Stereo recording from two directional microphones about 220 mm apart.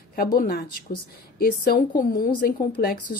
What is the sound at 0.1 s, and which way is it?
A woman's voice, 40° left (ahead or behind).